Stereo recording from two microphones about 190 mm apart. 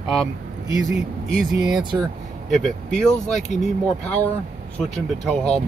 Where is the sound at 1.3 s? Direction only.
Centre (ahead or behind).